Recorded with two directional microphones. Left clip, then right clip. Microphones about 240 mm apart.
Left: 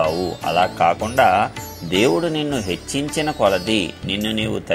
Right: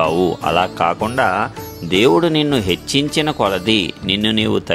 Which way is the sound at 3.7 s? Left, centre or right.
Right.